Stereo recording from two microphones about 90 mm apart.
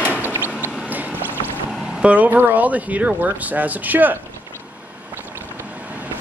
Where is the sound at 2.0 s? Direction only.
15° right (ahead or behind).